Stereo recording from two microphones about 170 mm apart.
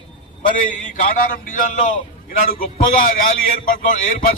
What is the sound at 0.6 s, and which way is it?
A man's voice, 50° left (ahead or behind).